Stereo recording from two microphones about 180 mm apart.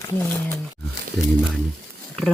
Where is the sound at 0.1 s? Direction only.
15° left (ahead or behind).